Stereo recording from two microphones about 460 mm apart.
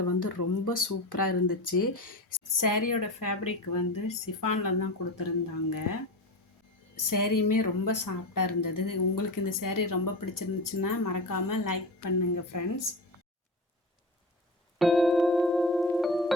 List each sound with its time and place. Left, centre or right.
0.2 s speech: left
6.9 s a woman's voice: left
14.8 s keyboard: centre